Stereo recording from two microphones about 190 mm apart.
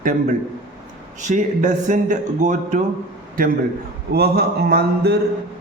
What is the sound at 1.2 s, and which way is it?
Speech, 40° right (ahead or behind).